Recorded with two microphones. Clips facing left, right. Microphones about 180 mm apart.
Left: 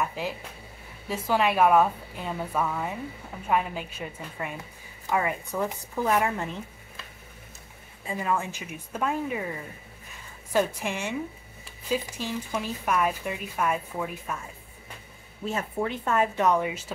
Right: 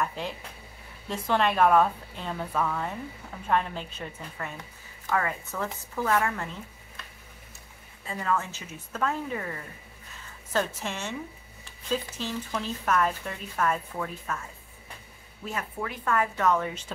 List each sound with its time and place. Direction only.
0.0 s speech: 5° left (ahead or behind)
8.0 s speech: 15° left (ahead or behind)
15.4 s speech: 25° left (ahead or behind)